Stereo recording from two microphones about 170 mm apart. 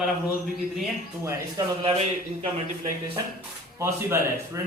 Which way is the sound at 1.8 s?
30° right (ahead or behind).